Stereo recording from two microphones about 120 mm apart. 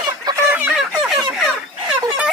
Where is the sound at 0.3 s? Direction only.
35° right (ahead or behind).